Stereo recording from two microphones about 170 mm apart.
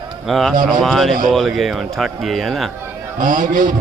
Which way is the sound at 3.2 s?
55° right (ahead or behind).